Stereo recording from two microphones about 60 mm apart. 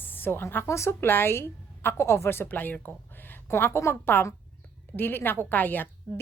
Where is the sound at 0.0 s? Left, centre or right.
Left.